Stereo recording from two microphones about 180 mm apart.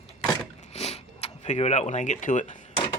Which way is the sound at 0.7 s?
35° left (ahead or behind).